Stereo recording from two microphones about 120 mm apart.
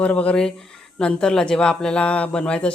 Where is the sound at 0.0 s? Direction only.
10° left (ahead or behind).